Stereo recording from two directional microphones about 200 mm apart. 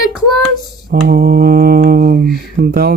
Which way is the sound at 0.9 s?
45° right (ahead or behind).